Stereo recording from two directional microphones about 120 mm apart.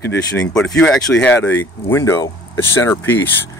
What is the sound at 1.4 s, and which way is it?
Speech, 20° left (ahead or behind).